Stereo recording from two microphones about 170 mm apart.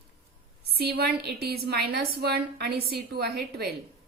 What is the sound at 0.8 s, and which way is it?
A woman's voice, 65° right (ahead or behind).